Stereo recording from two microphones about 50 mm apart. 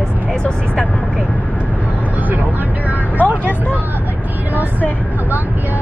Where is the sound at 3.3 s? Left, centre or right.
Left.